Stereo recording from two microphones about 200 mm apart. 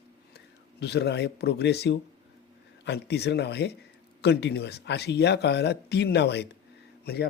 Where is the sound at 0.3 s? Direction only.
55° left (ahead or behind).